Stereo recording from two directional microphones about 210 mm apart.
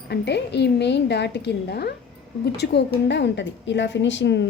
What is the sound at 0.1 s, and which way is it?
A woman's voice, 55° left (ahead or behind).